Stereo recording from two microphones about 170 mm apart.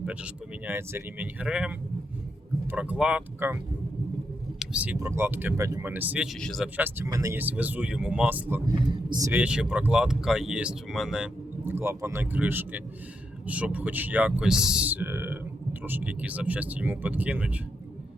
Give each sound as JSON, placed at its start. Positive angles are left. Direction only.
{"t": 0.0, "sound": "speech", "side_deg": -10}
{"t": 4.6, "sound": "speech", "side_deg": -5}
{"t": 6.4, "sound": "speech", "side_deg": 0}
{"t": 6.7, "sound": "speech", "side_deg": -15}
{"t": 8.9, "sound": "speech", "side_deg": -25}
{"t": 9.3, "sound": "speech", "side_deg": -5}